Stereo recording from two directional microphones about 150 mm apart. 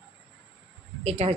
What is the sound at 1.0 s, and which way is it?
Speech, 45° right (ahead or behind).